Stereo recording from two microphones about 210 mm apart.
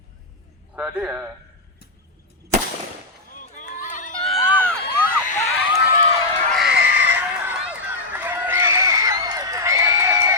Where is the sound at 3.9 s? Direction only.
35° left (ahead or behind).